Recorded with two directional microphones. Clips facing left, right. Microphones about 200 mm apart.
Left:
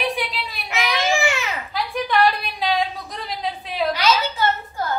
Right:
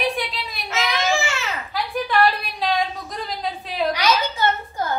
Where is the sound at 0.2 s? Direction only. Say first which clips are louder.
Left 2 dB; centre (ahead or behind).